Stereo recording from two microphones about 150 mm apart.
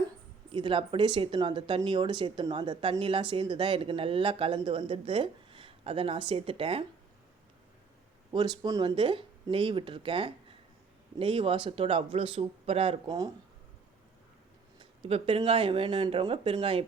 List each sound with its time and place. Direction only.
0.5 s speech: 35° right (ahead or behind)
8.3 s speech: 30° right (ahead or behind)
14.8 s speech: 40° right (ahead or behind)